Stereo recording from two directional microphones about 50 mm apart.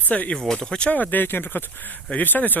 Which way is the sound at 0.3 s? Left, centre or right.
Centre.